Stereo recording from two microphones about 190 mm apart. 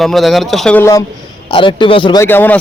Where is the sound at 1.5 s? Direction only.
25° left (ahead or behind).